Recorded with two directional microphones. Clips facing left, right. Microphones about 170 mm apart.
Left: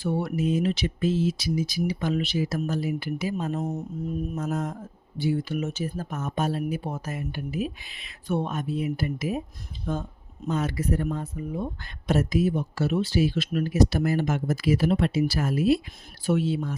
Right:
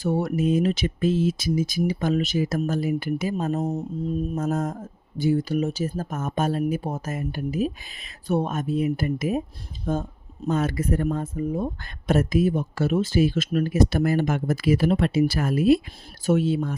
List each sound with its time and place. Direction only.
0.0 s speech: 45° right (ahead or behind)